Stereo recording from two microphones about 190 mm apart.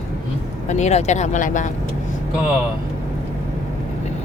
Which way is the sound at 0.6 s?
40° left (ahead or behind).